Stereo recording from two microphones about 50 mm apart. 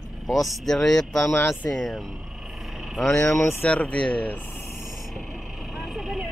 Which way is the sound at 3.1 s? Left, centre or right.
Centre.